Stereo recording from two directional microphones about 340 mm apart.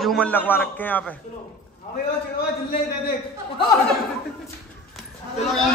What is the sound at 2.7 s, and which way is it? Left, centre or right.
Speech, left.